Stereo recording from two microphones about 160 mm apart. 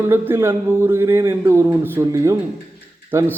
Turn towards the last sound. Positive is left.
turn(degrees=-15)  # may be behind; listen again after turning